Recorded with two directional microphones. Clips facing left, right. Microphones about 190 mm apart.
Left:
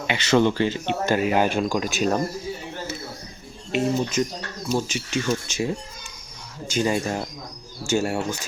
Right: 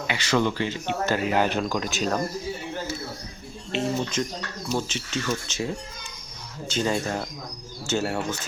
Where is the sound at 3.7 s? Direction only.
10° left (ahead or behind).